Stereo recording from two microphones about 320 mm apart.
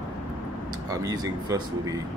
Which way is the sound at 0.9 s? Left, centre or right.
Centre.